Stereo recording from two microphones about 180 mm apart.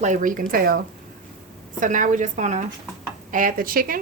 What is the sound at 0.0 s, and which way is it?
Speech, 45° right (ahead or behind).